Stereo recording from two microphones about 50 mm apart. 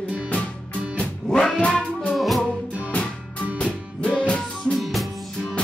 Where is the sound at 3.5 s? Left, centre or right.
Left.